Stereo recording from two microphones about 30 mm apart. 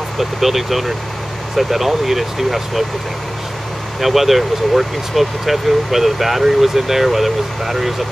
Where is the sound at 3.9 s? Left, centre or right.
Centre.